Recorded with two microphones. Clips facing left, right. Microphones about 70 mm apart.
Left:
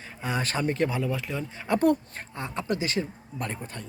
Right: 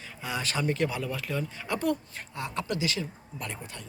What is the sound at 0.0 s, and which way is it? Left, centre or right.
Speech, left.